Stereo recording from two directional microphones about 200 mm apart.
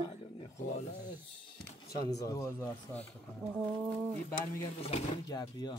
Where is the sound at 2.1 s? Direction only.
15° left (ahead or behind).